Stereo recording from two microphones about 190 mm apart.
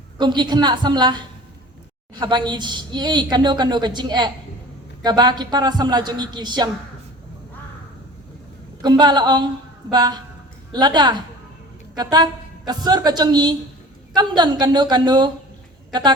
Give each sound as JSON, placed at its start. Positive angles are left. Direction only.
{"t": 0.2, "sound": "a woman's voice", "side_deg": -25}
{"t": 8.8, "sound": "a woman's voice", "side_deg": -20}